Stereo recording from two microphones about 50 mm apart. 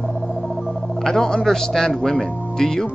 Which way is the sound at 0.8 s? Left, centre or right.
Centre.